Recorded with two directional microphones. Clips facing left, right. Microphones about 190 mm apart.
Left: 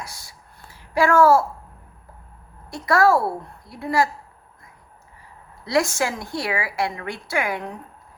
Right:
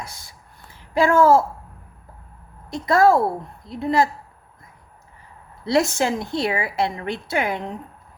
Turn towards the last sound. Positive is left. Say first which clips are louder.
# right 2 dB
turn(degrees=-25)  # may be behind; listen again after turning